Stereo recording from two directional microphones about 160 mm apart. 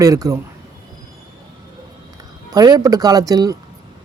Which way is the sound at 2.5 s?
25° right (ahead or behind).